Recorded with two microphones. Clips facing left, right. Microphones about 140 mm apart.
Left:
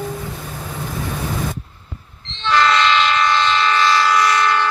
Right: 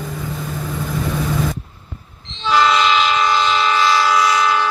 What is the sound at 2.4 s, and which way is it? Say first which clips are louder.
Train: right 1 dB; 10° right (ahead or behind).